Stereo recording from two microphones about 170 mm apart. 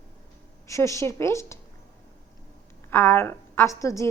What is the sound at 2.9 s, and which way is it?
A woman's voice, 15° left (ahead or behind).